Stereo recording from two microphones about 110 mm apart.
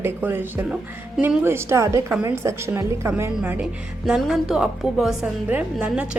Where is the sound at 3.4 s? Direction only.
10° right (ahead or behind).